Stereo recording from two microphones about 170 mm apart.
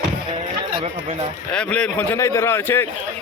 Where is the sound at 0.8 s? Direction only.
40° right (ahead or behind).